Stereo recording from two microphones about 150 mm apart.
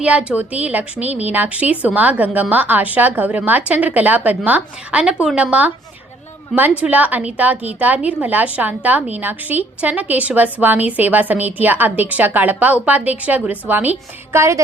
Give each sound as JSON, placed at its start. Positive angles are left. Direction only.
{"t": 0.0, "sound": "a woman's voice", "side_deg": -5}